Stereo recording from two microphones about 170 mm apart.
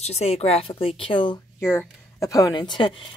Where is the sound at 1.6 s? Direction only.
15° left (ahead or behind).